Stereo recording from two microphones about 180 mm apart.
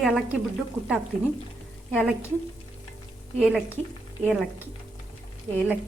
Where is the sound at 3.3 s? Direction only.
Centre (ahead or behind).